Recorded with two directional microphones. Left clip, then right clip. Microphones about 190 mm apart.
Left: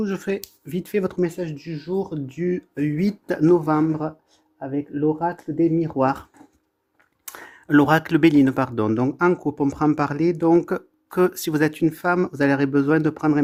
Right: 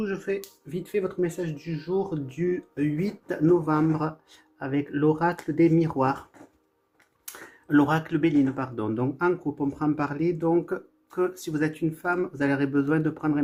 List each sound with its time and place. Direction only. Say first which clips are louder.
0.0 s speech: left 3 dB; 55° left (ahead or behind)
4.6 s speech: left 1 dB; 5° left (ahead or behind)
6.0 s speech: left 4 dB; 45° left (ahead or behind)
7.3 s speech: left 5 dB; 40° left (ahead or behind)